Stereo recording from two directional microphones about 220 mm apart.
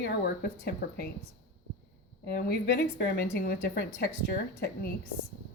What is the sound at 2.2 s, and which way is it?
Speech, 45° left (ahead or behind).